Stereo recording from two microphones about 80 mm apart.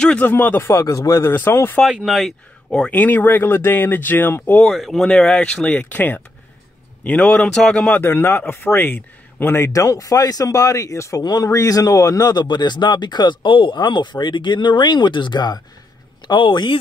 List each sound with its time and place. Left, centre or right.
0.2 s speech: left
1.3 s speech: left
1.9 s speech: centre
2.9 s speech: left
4.6 s speech: centre
7.9 s speech: left
9.7 s speech: left
16.3 s speech: left